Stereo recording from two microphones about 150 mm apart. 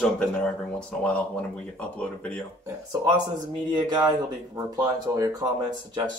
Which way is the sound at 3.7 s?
30° right (ahead or behind).